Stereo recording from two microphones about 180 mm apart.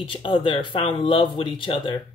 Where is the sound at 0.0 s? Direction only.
30° left (ahead or behind).